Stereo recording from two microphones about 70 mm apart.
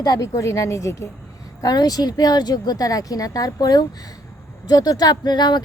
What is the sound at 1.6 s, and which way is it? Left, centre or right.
Speech, left.